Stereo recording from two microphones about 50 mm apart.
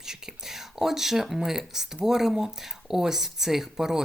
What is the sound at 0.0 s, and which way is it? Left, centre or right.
Whispering, centre.